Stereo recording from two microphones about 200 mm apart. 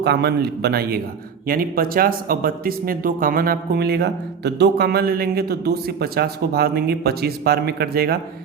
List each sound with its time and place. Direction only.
0.0 s a man's voice: 55° right (ahead or behind)